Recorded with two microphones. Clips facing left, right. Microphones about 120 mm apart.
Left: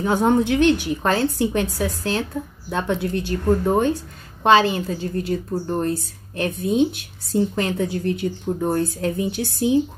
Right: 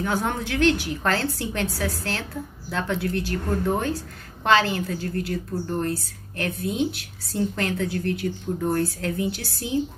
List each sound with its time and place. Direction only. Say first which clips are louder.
0.0 s a woman's voice: left 8 dB; 20° left (ahead or behind)